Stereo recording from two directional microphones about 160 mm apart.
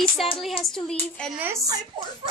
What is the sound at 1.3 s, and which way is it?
Speech, 15° right (ahead or behind).